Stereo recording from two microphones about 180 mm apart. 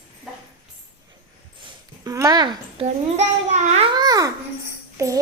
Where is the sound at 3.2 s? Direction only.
35° right (ahead or behind).